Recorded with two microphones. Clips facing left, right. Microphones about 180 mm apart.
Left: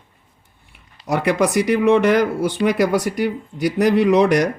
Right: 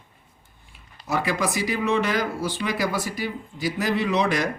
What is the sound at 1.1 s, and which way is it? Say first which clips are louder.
Speech: left 7 dB; 65° left (ahead or behind).